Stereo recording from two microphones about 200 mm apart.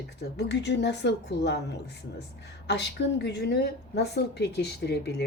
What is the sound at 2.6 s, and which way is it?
A woman's voice, 60° left (ahead or behind).